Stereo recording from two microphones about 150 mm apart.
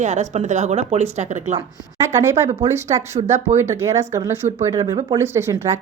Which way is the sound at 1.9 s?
15° right (ahead or behind).